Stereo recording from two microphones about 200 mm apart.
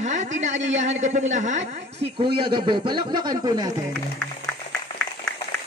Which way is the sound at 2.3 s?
25° right (ahead or behind).